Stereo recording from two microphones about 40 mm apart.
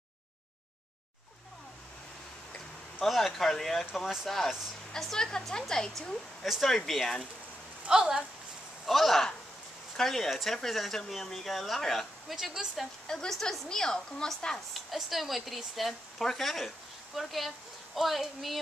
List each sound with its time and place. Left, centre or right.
3.0 s speech: centre
4.9 s speech: centre
6.4 s speech: centre
7.9 s speech: centre
8.8 s speech: centre
12.3 s speech: centre
13.0 s a woman's voice: centre
14.7 s speech: centre